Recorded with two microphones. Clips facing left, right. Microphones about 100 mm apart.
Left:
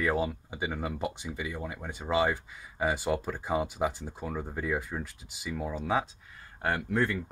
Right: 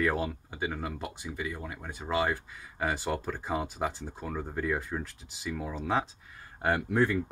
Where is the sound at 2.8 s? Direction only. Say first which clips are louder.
Left 2 dB; 5° left (ahead or behind).